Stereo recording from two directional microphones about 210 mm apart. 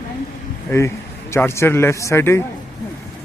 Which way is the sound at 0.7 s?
15° left (ahead or behind).